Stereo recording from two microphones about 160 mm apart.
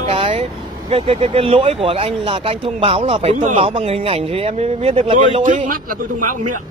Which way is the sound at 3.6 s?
35° right (ahead or behind).